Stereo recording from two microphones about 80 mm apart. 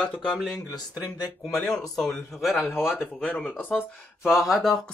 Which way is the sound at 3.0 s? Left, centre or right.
Centre.